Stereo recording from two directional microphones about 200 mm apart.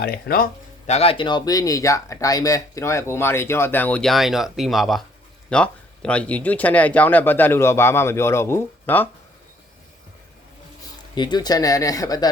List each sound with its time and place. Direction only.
0.0 s speech: 50° left (ahead or behind)
0.9 s speech: 30° left (ahead or behind); by 9.0 s 10° left (ahead or behind)
11.1 s speech: 20° left (ahead or behind)